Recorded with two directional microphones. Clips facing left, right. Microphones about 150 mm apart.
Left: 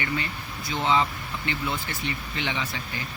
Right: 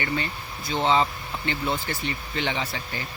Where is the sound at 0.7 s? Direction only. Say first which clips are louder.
Right 2 dB; 30° right (ahead or behind).